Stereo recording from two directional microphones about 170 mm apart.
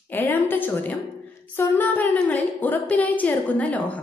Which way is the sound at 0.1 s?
10° left (ahead or behind).